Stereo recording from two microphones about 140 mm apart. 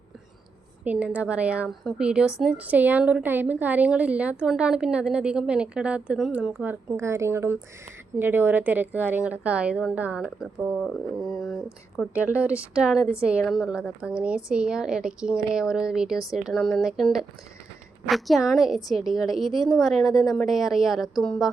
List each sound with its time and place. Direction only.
0.9 s a woman's voice: 10° right (ahead or behind)
10.8 s a woman's voice: centre (ahead or behind)
11.9 s a woman's voice: 10° right (ahead or behind)